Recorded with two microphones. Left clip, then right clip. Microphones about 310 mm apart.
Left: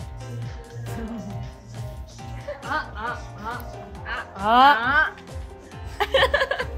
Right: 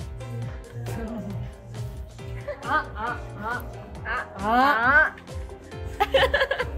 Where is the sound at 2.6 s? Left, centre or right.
Centre.